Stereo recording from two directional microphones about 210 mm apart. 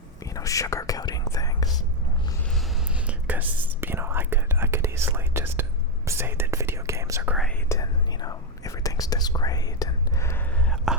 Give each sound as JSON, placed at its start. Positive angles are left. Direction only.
{"t": 0.2, "sound": "whispering", "side_deg": 15}
{"t": 2.6, "sound": "whispering", "side_deg": -5}
{"t": 7.7, "sound": "whispering", "side_deg": 15}
{"t": 10.9, "sound": "whispering", "side_deg": 0}